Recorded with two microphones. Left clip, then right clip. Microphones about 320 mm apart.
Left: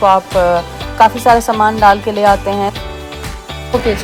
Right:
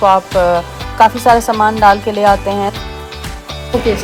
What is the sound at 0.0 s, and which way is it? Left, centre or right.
Speech, centre.